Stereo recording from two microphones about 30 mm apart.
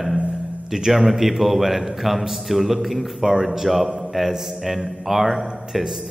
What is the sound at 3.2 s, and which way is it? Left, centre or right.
Speech, centre.